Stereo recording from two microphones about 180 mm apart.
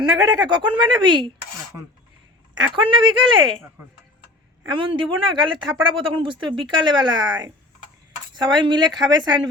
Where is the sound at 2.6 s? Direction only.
30° right (ahead or behind).